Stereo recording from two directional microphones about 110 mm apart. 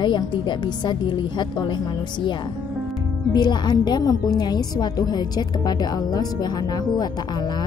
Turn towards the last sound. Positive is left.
turn(degrees=35)  # may be behind; listen again after turning